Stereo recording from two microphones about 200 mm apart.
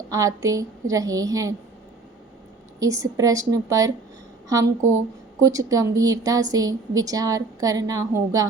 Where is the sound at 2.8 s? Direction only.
15° right (ahead or behind).